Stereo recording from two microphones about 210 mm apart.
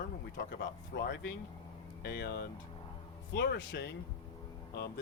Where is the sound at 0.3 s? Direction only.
55° left (ahead or behind).